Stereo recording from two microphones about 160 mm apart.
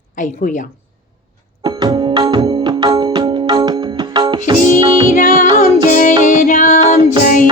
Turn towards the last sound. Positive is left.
turn(degrees=55)  # may be behind; listen again after turning